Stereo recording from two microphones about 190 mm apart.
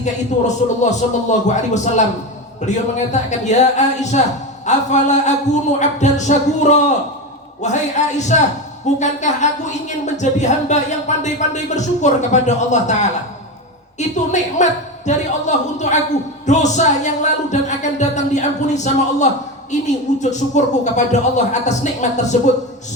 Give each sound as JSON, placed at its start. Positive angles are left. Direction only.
{"t": 0.0, "sound": "a woman's voice", "side_deg": 40}